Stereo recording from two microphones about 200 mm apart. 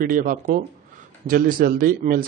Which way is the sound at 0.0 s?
45° right (ahead or behind).